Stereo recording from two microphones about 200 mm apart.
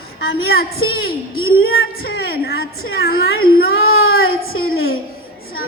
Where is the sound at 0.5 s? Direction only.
50° left (ahead or behind).